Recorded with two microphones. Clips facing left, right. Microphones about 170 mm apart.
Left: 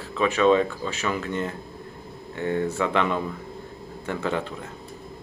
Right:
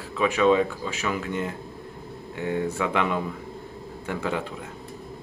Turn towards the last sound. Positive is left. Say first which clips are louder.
# left 1 dB
turn(degrees=-5)  # may be behind; listen again after turning